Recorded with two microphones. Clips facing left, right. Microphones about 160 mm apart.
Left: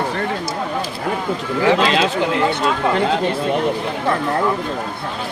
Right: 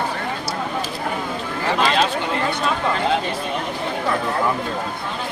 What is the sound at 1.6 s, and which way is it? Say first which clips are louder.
Speech: left 4 dB; 90° left.